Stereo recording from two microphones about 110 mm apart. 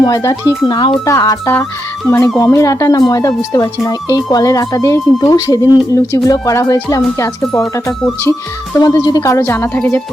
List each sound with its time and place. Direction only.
0.0 s speech: 35° left (ahead or behind)
0.7 s speech: 45° left (ahead or behind)
1.0 s speech: 30° left (ahead or behind)
8.8 s speech: 35° left (ahead or behind)
9.4 s speech: 20° left (ahead or behind)